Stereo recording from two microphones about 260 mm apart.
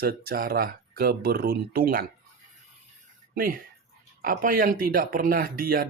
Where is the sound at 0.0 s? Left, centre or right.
Right.